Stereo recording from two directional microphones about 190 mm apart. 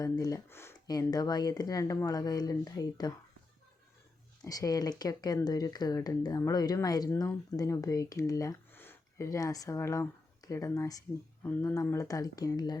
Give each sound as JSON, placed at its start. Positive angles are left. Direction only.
{"t": 0.0, "sound": "speech", "side_deg": 20}
{"t": 4.4, "sound": "speech", "side_deg": 20}